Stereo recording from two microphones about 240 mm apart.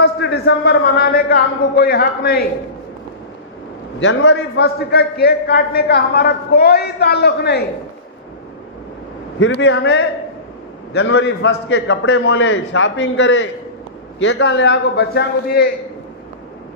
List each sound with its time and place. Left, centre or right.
0.0 s a man's voice: left
4.0 s a man's voice: left
9.4 s a man's voice: left